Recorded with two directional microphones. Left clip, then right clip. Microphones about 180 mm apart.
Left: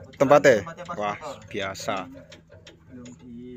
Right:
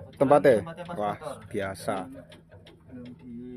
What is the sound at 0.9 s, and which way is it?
Speech, 15° right (ahead or behind).